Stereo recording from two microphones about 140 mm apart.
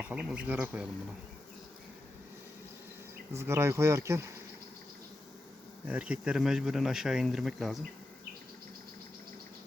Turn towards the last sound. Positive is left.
turn(degrees=0)  # may be behind; listen again after turning